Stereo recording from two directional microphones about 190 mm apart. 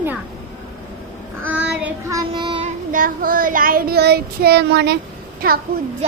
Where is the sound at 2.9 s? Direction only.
45° right (ahead or behind).